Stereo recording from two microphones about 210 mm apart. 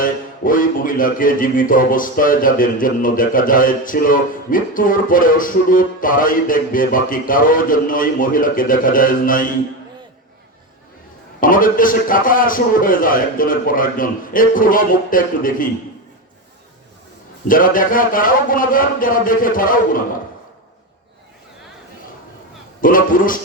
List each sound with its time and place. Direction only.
0.0 s music: 40° left (ahead or behind)
11.3 s music: 40° left (ahead or behind)
17.5 s music: 40° left (ahead or behind)
22.8 s music: 40° left (ahead or behind)